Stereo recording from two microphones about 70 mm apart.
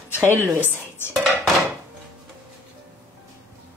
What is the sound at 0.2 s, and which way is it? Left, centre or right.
Speech, left.